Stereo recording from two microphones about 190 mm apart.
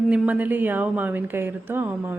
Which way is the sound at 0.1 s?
10° right (ahead or behind).